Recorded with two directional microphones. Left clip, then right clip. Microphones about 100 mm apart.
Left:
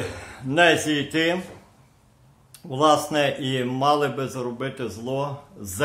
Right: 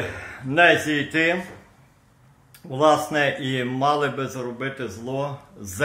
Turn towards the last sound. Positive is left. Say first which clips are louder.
# even
turn(degrees=50)  # may be behind; listen again after turning